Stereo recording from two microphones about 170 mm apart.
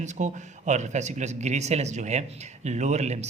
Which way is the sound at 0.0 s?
45° right (ahead or behind).